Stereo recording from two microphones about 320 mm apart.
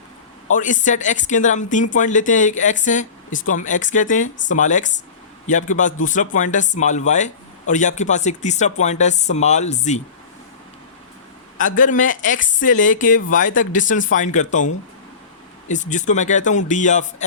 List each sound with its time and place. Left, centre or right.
0.5 s a woman's voice: left
11.5 s a woman's voice: left
15.7 s a woman's voice: left